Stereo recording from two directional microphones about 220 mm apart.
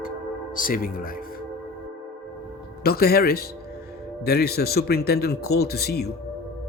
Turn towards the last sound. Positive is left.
turn(degrees=45)  # may be behind; listen again after turning